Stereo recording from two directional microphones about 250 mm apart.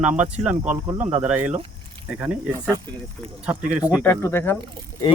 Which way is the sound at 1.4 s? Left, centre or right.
Right.